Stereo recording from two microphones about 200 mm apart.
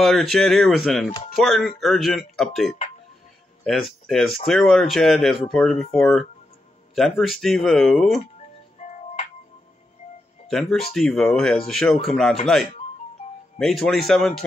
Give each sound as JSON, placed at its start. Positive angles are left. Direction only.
{"t": 0.0, "sound": "speech", "side_deg": 0}
{"t": 8.8, "sound": "music", "side_deg": 35}
{"t": 11.0, "sound": "speech", "side_deg": 0}
{"t": 13.6, "sound": "speech", "side_deg": 0}